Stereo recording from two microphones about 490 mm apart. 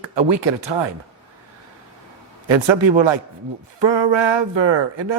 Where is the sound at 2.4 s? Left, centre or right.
Right.